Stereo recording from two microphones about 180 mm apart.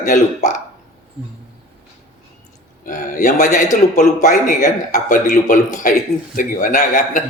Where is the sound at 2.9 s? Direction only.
50° left (ahead or behind).